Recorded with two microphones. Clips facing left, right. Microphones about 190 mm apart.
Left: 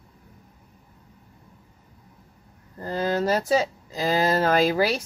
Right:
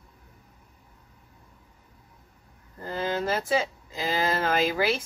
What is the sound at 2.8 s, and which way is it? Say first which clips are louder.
Speech: left 4 dB; 40° left (ahead or behind).